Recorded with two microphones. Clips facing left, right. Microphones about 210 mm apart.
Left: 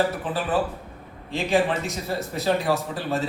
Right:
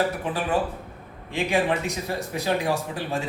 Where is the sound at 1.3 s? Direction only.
15° right (ahead or behind).